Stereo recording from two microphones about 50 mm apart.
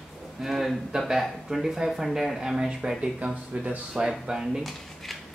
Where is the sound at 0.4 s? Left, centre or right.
Centre.